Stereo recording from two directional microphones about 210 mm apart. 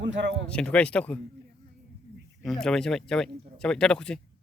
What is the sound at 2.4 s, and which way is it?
Speech, centre (ahead or behind).